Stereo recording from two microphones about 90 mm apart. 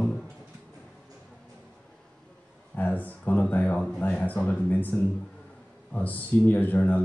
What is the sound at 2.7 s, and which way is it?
Speech, 20° left (ahead or behind).